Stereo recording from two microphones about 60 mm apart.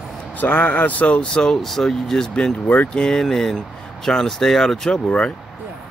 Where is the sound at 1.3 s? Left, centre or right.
Centre.